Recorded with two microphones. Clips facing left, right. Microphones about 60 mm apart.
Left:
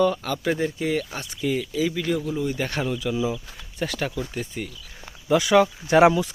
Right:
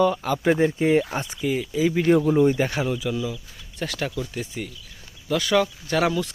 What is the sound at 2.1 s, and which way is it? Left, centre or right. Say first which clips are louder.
Speech: right 8 dB; right.